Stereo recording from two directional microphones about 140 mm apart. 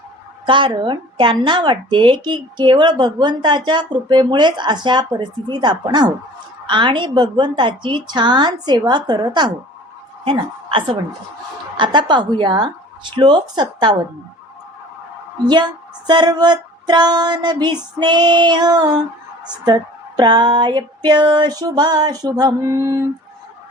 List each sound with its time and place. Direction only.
0.4 s a woman's voice: 35° right (ahead or behind)
15.4 s a woman's voice: 30° right (ahead or behind)
19.6 s a sound: 30° right (ahead or behind)